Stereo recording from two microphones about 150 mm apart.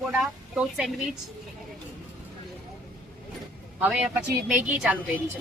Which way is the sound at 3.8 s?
10° right (ahead or behind).